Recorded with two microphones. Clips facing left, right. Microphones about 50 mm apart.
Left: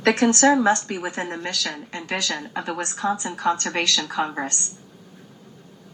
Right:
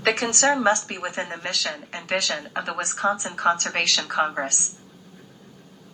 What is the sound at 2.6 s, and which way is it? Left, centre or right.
Speech, right.